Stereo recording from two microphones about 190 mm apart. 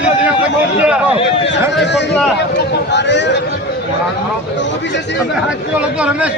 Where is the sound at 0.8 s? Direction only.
5° right (ahead or behind).